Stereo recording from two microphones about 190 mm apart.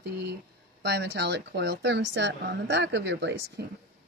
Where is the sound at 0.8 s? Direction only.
65° right (ahead or behind).